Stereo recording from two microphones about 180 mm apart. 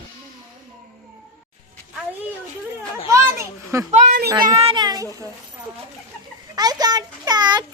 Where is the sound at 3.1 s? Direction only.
15° right (ahead or behind).